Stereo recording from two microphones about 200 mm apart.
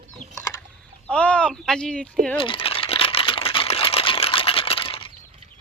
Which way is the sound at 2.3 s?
25° left (ahead or behind).